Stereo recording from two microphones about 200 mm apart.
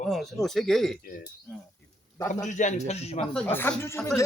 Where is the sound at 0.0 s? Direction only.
Centre (ahead or behind).